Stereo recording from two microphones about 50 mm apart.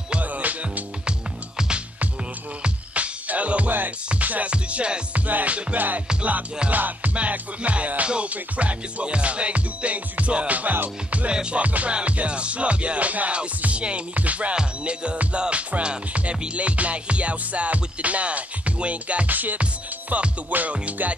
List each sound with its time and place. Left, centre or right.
0.1 s music: right
2.6 s music: right
11.2 s music: right